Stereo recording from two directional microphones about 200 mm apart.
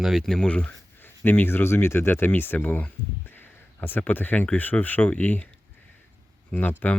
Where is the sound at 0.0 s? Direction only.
Centre (ahead or behind).